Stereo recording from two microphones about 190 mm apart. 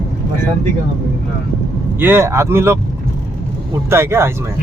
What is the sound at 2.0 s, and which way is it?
Speech, 10° right (ahead or behind).